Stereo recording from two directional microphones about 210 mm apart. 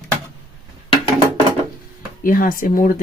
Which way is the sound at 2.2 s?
40° left (ahead or behind).